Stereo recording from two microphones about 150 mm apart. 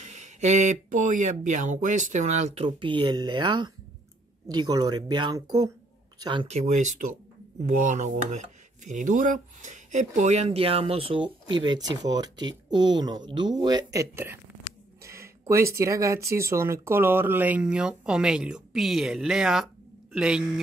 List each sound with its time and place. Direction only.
0.0 s speech: 50° right (ahead or behind); by 6.4 s 30° right (ahead or behind)
6.4 s speech: 50° right (ahead or behind)
7.6 s dishes: 55° right (ahead or behind); by 14.4 s 15° right (ahead or behind)
15.0 s speech: 20° right (ahead or behind)